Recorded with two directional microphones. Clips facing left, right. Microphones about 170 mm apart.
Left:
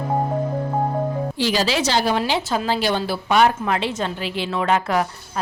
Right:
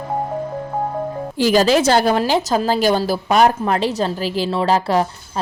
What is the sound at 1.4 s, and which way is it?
A woman's voice, 45° right (ahead or behind).